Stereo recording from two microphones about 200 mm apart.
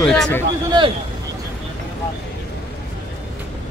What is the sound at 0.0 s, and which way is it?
Speech, 5° left (ahead or behind).